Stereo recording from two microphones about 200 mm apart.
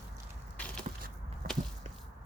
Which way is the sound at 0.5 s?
5° left (ahead or behind).